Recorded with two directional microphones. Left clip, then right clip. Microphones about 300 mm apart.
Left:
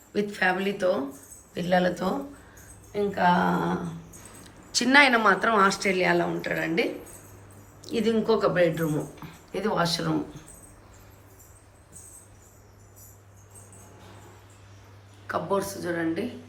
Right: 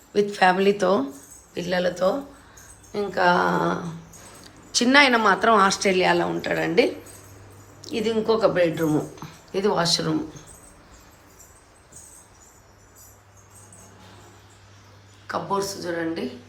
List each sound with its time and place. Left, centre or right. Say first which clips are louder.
0.1 s speech: right 6 dB; centre
1.5 s speech: even; centre
2.9 s speech: right 3 dB; centre
4.7 s speech: right 2 dB; centre
15.3 s speech: right 2 dB; centre